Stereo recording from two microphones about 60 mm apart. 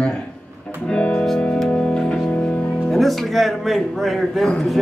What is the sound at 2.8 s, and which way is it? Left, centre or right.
Speech, centre.